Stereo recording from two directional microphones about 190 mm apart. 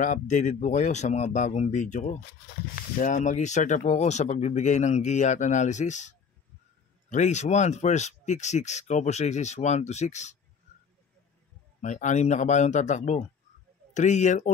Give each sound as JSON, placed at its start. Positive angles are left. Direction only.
{"t": 0.0, "sound": "speech", "side_deg": 40}
{"t": 11.8, "sound": "speech", "side_deg": 40}